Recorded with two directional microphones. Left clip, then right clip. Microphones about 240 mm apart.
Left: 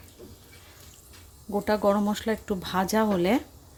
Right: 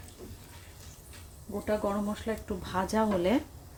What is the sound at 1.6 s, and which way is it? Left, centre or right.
Speech, left.